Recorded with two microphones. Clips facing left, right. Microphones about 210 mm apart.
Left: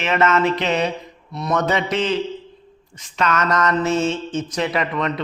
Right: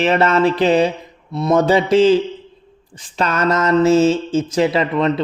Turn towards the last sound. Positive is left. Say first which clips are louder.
# right 6 dB
turn(degrees=-30)  # may be behind; listen again after turning